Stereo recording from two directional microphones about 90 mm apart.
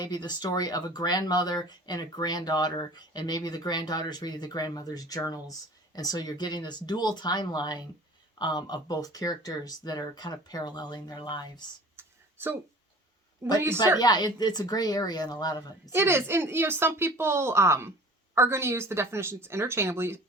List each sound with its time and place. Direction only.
0.0 s speech: 45° left (ahead or behind)
11.9 s a sound: 25° right (ahead or behind)
13.4 s speech: 35° right (ahead or behind)
14.0 s speech: 50° left (ahead or behind)
15.9 s speech: 30° right (ahead or behind)